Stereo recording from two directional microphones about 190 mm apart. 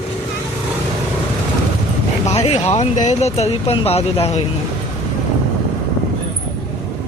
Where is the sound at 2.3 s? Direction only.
35° left (ahead or behind).